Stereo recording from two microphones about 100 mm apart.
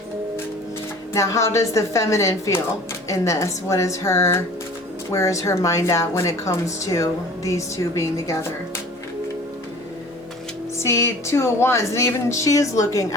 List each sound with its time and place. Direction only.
1.1 s a woman's voice: 30° left (ahead or behind)
10.8 s speech: 25° left (ahead or behind)